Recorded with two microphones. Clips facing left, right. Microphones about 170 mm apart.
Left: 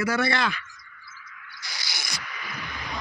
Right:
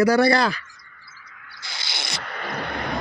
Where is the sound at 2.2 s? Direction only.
60° right (ahead or behind).